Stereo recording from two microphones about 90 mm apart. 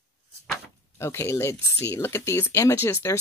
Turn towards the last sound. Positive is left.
turn(degrees=25)  # may be behind; listen again after turning